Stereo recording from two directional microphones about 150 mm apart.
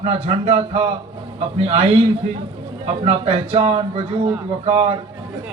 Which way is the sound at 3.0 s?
35° right (ahead or behind).